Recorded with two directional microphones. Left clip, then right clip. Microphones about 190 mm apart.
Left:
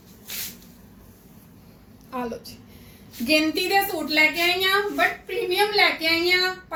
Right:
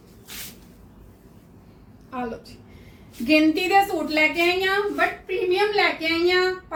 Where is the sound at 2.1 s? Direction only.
20° right (ahead or behind).